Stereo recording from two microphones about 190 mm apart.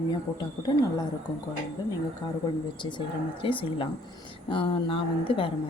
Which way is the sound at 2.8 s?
25° left (ahead or behind).